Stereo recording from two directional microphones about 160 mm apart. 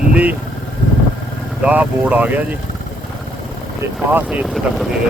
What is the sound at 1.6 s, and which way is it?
Speech, 10° right (ahead or behind).